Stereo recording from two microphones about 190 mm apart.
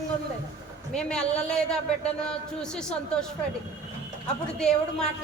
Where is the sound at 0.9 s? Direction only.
5° left (ahead or behind).